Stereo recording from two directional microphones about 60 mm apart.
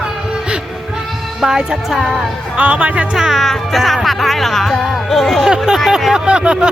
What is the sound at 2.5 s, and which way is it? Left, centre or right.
Speech, right.